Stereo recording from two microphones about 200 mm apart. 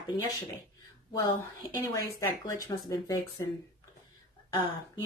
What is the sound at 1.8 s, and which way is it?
A woman's voice, 15° left (ahead or behind).